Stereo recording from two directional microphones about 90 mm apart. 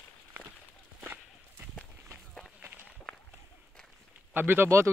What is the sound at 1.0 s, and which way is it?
Walk, 25° right (ahead or behind).